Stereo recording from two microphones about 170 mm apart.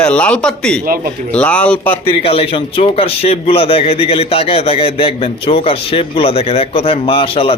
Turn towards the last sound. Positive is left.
turn(degrees=35)  # may be behind; listen again after turning